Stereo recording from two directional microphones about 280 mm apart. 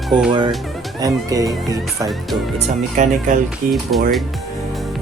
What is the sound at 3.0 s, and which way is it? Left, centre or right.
Speech, right.